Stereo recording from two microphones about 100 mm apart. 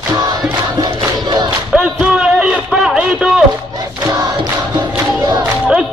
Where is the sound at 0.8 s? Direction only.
50° right (ahead or behind).